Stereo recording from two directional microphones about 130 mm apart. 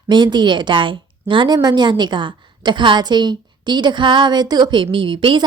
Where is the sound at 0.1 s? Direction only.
35° right (ahead or behind).